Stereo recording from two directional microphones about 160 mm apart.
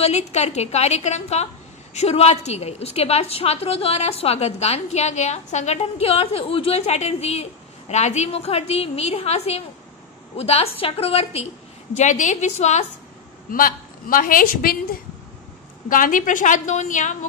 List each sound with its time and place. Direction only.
0.0 s a woman's voice: 45° left (ahead or behind)
12.0 s a woman's voice: 50° left (ahead or behind)
13.5 s a woman's voice: 60° left (ahead or behind)